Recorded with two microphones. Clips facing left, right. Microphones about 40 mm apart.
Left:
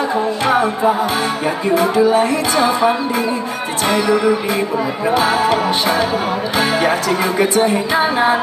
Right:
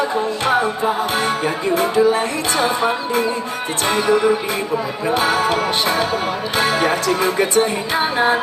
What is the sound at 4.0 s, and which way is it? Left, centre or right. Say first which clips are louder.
Music: right 1 dB; right.